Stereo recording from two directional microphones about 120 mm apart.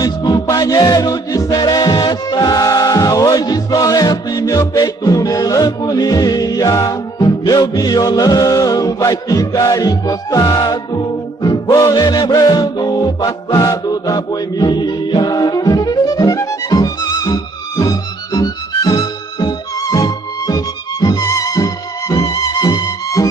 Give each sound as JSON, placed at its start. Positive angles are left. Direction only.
{"t": 0.0, "sound": "music", "side_deg": 30}